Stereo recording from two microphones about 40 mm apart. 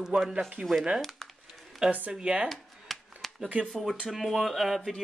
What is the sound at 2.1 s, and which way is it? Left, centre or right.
Speech, right.